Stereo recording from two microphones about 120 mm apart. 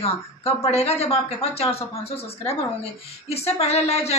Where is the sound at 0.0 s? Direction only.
60° left (ahead or behind).